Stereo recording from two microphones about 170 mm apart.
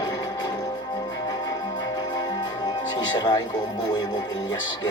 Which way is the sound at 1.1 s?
25° left (ahead or behind).